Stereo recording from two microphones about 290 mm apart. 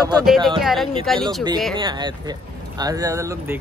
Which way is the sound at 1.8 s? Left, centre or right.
Centre.